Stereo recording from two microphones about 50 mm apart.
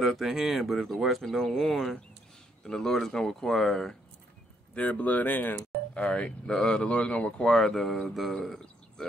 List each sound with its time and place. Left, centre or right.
0.0 s speech: centre
4.7 s speech: left
5.9 s speech: left
7.4 s speech: centre
8.5 s a sound: centre